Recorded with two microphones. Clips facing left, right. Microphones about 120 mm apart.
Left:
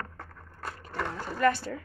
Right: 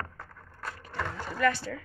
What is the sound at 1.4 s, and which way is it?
Speech, 45° left (ahead or behind).